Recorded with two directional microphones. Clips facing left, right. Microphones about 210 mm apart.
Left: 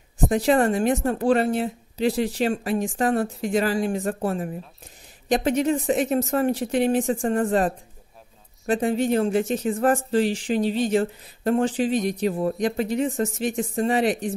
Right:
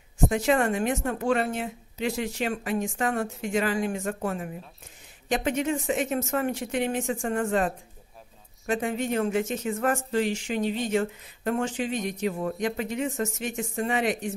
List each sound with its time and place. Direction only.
0.3 s speech: 35° left (ahead or behind)